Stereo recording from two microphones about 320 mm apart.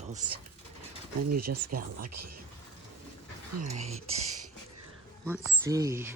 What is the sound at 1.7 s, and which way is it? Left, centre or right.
Speech, right.